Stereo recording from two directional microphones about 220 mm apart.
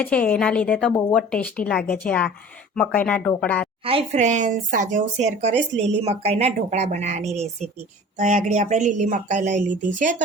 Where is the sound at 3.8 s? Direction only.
25° right (ahead or behind).